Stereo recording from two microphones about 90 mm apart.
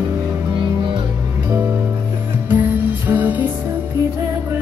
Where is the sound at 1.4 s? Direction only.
20° right (ahead or behind).